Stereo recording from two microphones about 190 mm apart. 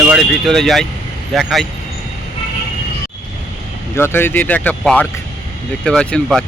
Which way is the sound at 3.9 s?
10° left (ahead or behind).